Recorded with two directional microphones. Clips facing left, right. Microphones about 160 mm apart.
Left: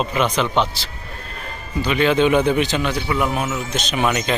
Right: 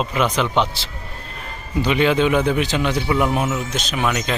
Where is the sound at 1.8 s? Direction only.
15° right (ahead or behind).